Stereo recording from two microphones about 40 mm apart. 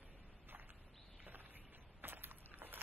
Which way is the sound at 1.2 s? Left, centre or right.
Right.